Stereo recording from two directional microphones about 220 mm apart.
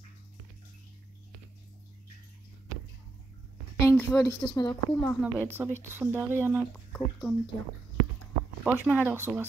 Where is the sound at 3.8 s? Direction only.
10° left (ahead or behind).